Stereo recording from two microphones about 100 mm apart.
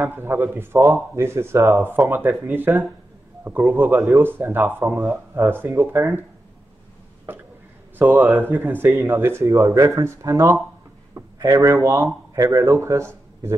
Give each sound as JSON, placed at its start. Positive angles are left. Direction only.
{"t": 0.1, "sound": "speech", "side_deg": -25}
{"t": 8.0, "sound": "speech", "side_deg": -20}
{"t": 11.2, "sound": "a sound", "side_deg": -35}
{"t": 11.5, "sound": "speech", "side_deg": -30}